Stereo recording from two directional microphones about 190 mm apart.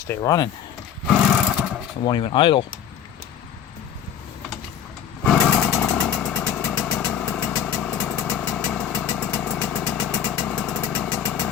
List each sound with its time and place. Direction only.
0.1 s speech: 20° left (ahead or behind)
1.0 s a sound: 5° right (ahead or behind)
2.0 s speech: 25° left (ahead or behind)
5.2 s vehicle: 5° left (ahead or behind)